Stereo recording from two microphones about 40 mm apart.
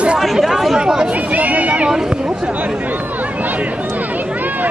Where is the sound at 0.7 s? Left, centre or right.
Centre.